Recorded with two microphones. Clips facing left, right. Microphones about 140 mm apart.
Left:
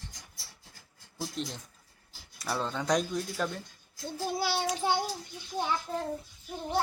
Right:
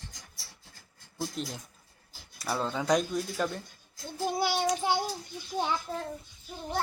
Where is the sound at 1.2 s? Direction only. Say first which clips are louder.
Right 1 dB; 5° right (ahead or behind).